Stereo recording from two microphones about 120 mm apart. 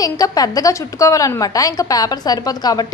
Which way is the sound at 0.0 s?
30° left (ahead or behind).